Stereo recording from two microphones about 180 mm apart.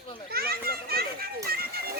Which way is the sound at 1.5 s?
55° right (ahead or behind).